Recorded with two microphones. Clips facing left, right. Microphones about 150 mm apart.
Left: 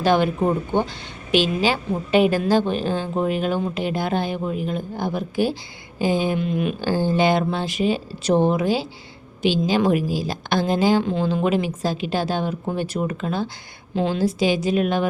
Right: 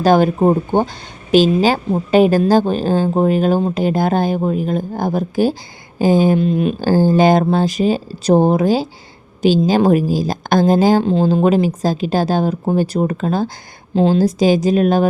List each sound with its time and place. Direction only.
0.0 s a woman's voice: 40° right (ahead or behind)